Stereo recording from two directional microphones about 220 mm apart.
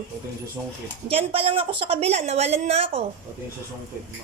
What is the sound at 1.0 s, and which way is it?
A woman's voice, 25° right (ahead or behind).